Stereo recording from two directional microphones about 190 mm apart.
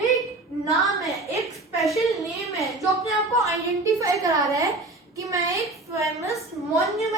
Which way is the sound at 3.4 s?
15° right (ahead or behind).